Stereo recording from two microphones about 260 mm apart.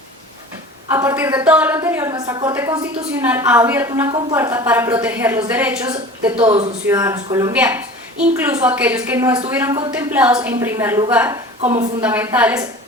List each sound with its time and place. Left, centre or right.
0.9 s a woman's voice: centre
11.7 s a woman's voice: right
12.0 s a woman's voice: centre